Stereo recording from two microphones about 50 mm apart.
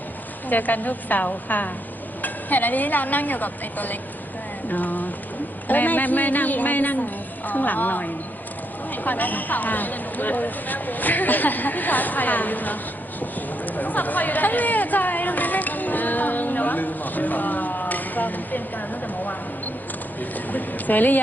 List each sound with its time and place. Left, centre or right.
0.4 s speech: left
13.7 s chatter: left
20.3 s speech: left